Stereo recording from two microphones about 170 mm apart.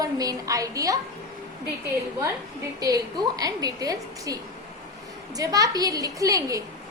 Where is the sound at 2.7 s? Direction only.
20° right (ahead or behind).